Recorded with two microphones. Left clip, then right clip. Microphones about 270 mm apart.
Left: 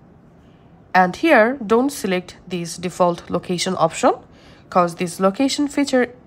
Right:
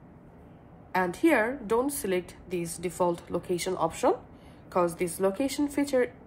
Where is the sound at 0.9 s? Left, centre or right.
Left.